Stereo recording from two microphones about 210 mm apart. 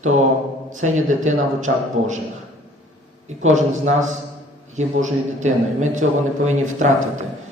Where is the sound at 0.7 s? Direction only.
35° right (ahead or behind).